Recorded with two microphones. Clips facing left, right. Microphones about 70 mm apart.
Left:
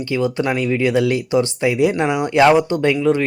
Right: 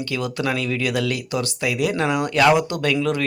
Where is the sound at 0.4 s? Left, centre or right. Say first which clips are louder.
Left 5 dB; left.